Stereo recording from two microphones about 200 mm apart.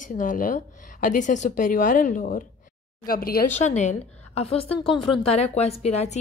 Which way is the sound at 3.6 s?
35° left (ahead or behind).